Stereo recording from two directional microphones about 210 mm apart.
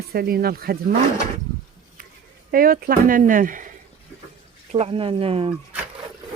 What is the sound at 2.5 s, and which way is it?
Speech, 45° right (ahead or behind).